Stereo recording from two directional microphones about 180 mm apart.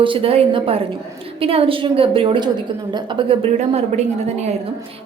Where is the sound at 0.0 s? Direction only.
30° right (ahead or behind).